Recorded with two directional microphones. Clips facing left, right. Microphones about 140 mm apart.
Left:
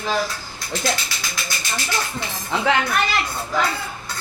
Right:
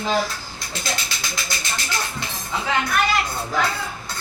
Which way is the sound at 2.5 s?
80° left.